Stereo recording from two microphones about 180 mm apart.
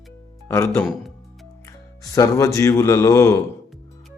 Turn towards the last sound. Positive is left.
turn(degrees=15)  # may be behind; listen again after turning